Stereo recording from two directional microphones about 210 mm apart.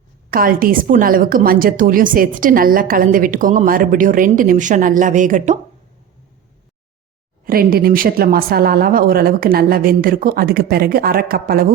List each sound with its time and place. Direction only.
0.3 s a woman's voice: 45° right (ahead or behind)
7.4 s speech: 45° right (ahead or behind)